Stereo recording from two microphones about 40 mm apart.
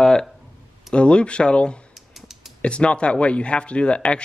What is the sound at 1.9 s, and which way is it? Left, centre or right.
Typing, centre.